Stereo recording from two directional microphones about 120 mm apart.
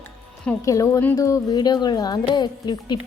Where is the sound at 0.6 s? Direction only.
25° left (ahead or behind).